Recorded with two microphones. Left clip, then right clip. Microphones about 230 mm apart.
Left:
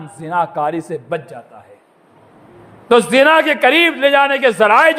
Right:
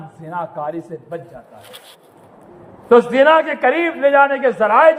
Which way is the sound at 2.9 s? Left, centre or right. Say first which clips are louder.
Even; left.